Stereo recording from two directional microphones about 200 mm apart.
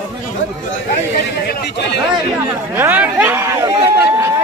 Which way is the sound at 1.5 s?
55° left (ahead or behind).